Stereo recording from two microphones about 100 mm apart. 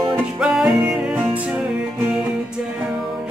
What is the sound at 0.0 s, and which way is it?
Music, 5° right (ahead or behind).